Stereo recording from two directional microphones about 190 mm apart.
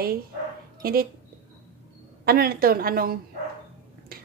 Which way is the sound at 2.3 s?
55° right (ahead or behind).